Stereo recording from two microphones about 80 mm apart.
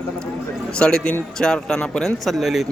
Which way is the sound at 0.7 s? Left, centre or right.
Centre.